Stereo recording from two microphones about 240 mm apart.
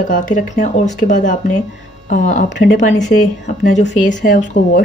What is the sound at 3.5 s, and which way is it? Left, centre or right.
A woman's voice, left.